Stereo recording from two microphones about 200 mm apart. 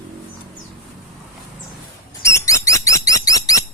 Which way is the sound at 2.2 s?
15° left (ahead or behind).